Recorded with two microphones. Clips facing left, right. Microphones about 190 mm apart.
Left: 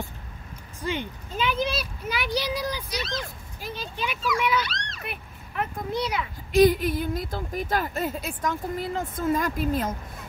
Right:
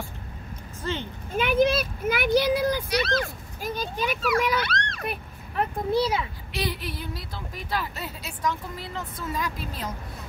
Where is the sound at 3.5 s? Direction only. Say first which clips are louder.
Right 4 dB; 45° right (ahead or behind).